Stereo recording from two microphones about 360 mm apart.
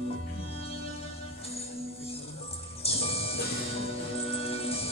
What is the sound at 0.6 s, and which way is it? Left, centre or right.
Music, centre.